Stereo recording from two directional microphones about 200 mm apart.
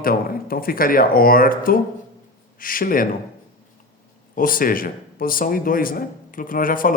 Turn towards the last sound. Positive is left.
turn(degrees=45)  # may be behind; listen again after turning